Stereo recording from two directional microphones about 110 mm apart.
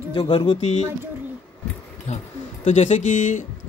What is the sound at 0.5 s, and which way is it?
Speech, 70° left (ahead or behind).